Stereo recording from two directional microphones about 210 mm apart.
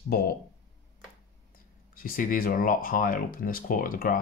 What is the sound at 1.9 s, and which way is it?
Speech, 40° left (ahead or behind).